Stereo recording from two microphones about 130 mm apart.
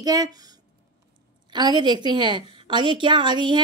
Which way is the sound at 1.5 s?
35° right (ahead or behind).